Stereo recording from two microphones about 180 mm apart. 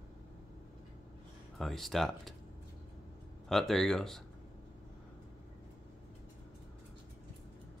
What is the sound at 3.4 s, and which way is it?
Speech, centre (ahead or behind).